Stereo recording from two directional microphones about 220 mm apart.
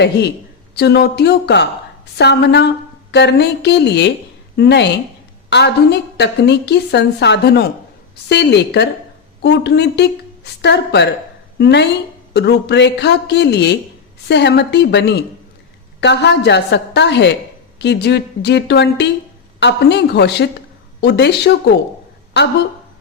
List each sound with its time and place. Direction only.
0.8 s a woman's voice: 50° left (ahead or behind)